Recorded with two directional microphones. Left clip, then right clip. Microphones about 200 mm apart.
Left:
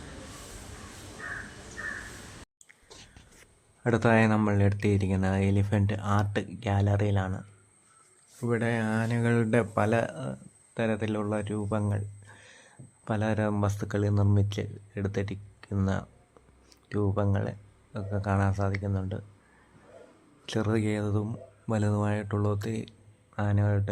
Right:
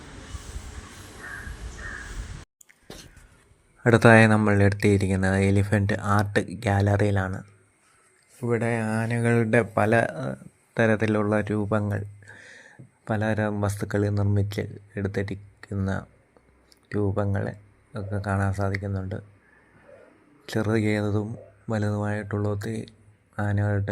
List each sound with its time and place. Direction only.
3.8 s a man's voice: 20° right (ahead or behind)
8.4 s speech: 5° right (ahead or behind)
16.9 s speech: 5° right (ahead or behind)
20.4 s speech: 5° right (ahead or behind)